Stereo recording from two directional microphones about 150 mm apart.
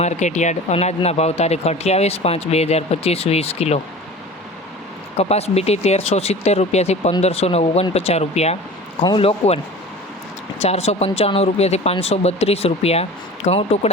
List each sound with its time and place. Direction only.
0.0 s speech: 50° left (ahead or behind)
5.1 s speech: 45° left (ahead or behind)
10.6 s speech: 45° left (ahead or behind)